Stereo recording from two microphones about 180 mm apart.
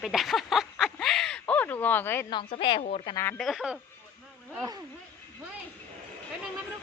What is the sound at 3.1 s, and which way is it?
Speech, 15° left (ahead or behind).